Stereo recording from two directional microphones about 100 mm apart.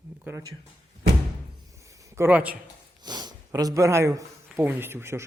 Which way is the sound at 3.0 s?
45° right (ahead or behind).